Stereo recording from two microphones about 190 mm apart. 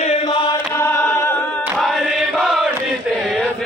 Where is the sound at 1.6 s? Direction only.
Centre (ahead or behind).